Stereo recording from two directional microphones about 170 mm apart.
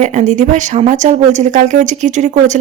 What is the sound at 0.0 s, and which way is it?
Speech, 45° right (ahead or behind).